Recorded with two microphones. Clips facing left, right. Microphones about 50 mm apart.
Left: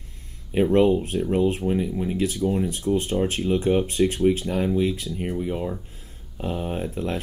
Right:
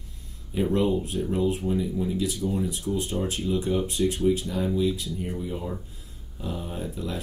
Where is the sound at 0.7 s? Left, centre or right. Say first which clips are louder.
Left 5 dB; left.